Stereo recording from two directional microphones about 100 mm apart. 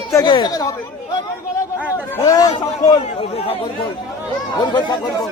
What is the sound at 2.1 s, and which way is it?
Speech, 35° left (ahead or behind).